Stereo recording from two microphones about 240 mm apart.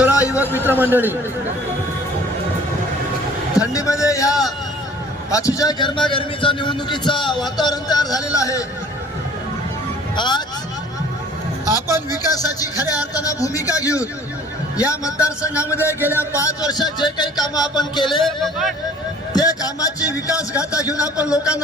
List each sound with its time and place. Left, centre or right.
0.1 s a sound: centre
0.6 s a man's voice: centre
3.5 s a man's voice: centre
10.2 s a man's voice: centre
11.6 s a man's voice: centre
16.0 s a man's voice: centre
16.3 s a man's voice: centre
18.2 s a man's voice: centre
19.3 s a man's voice: centre